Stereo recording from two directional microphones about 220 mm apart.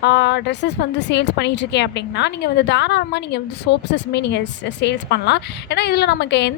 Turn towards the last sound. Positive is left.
turn(degrees=50)  # may be behind; listen again after turning